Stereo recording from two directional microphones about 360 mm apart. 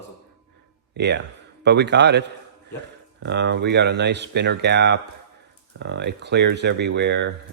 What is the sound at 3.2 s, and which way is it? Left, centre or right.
Speech, right.